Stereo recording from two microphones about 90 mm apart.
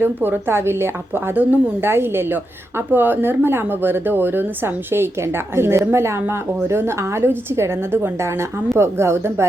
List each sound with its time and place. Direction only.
0.0 s a woman's voice: 25° right (ahead or behind)